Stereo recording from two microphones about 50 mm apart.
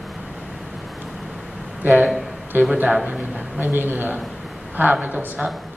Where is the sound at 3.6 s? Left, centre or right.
Right.